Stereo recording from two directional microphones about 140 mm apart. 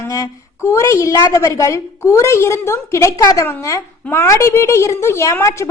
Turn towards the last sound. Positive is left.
turn(degrees=20)  # may be behind; listen again after turning